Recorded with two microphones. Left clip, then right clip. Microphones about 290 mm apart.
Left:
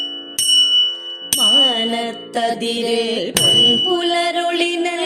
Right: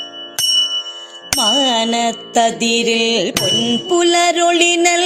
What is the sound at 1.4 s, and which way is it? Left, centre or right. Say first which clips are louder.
Music: left 1 dB; right.